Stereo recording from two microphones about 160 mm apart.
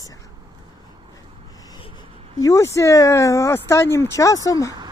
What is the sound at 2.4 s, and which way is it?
Speech, 20° left (ahead or behind).